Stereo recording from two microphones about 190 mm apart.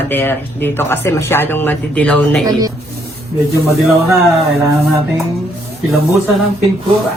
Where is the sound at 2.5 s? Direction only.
20° right (ahead or behind).